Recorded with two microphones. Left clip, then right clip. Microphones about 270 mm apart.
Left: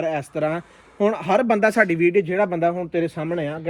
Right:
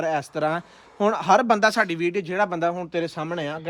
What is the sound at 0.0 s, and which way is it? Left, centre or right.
Speech, centre.